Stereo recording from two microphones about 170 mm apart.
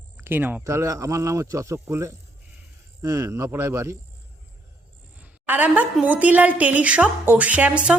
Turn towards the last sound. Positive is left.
turn(degrees=-5)  # may be behind; listen again after turning